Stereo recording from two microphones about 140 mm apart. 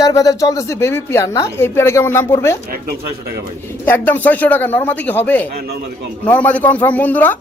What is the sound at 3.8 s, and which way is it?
Speech, 15° left (ahead or behind).